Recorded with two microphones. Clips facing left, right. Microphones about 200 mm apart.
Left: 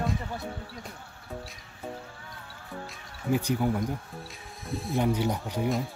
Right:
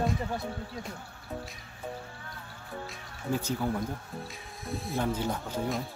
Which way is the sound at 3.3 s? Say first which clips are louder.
Left 4 dB; 15° left (ahead or behind).